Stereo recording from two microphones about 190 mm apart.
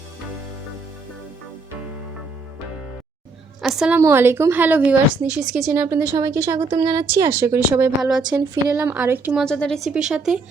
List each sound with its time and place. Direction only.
3.6 s a woman's voice: centre (ahead or behind)
8.0 s speech: 5° right (ahead or behind)
8.3 s speech: 15° right (ahead or behind)
9.4 s speech: 5° left (ahead or behind)